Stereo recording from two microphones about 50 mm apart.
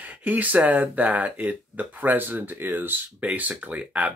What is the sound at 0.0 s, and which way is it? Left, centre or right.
Speech, right.